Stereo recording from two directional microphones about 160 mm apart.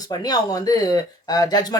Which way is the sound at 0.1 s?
25° left (ahead or behind).